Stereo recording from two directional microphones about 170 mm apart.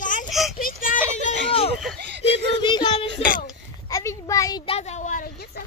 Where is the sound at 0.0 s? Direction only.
50° left (ahead or behind).